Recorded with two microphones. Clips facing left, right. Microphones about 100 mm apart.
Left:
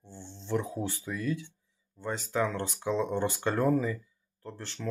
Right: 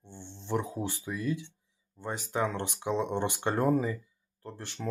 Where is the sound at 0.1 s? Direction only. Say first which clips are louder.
Even; 20° right (ahead or behind).